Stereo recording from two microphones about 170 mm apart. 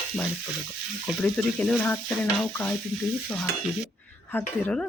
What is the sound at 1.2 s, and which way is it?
Speech, 5° left (ahead or behind).